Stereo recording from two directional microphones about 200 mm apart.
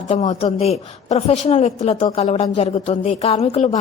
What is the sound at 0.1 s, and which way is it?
A woman's voice, 35° left (ahead or behind).